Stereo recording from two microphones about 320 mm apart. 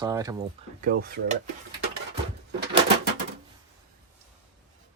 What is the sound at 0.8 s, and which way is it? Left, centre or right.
Speech, right.